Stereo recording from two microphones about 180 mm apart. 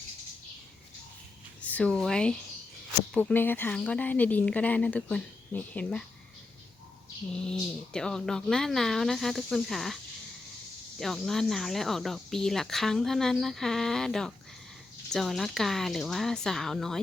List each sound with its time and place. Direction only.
1.6 s speech: 5° left (ahead or behind)
7.3 s speech: 5° left (ahead or behind)
11.0 s speech: centre (ahead or behind)